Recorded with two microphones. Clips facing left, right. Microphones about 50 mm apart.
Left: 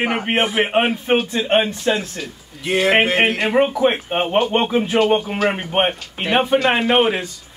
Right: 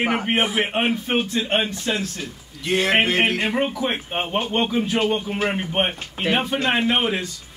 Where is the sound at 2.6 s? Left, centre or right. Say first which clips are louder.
Left 3 dB; centre.